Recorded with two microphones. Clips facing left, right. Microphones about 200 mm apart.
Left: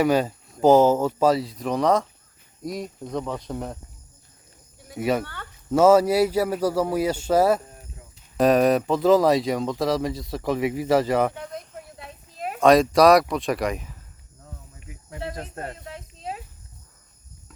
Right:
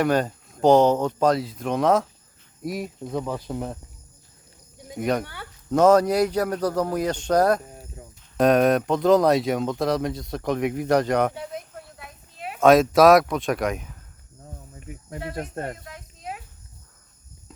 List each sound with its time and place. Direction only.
0.0 s speech: 5° left (ahead or behind)
4.9 s speech: 5° left (ahead or behind)
5.2 s speech: 10° right (ahead or behind)
5.7 s speech: 5° left (ahead or behind)
11.3 s a sound: 5° right (ahead or behind)
11.9 s a sound: 30° left (ahead or behind)
12.5 s speech: centre (ahead or behind)
15.8 s snake: 25° left (ahead or behind)